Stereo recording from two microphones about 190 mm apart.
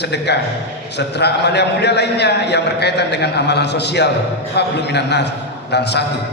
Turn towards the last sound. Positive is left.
turn(degrees=60)  # may be behind; listen again after turning